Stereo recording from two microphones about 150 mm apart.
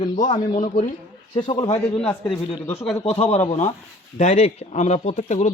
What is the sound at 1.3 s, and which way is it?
Speech, 30° left (ahead or behind).